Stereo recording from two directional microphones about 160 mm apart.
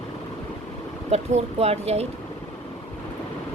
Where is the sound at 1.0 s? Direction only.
45° right (ahead or behind).